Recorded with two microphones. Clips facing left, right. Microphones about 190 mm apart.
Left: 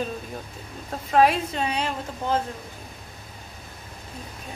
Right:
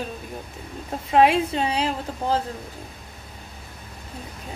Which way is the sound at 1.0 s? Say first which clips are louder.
Right 2 dB; 25° right (ahead or behind).